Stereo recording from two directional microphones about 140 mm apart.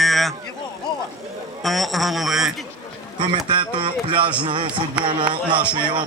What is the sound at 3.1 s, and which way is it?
Speech, 35° right (ahead or behind).